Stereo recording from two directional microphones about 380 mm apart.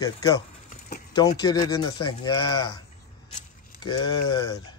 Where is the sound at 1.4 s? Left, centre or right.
Centre.